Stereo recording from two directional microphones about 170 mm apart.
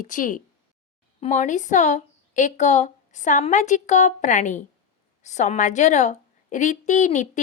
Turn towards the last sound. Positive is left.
turn(degrees=45)  # may be behind; listen again after turning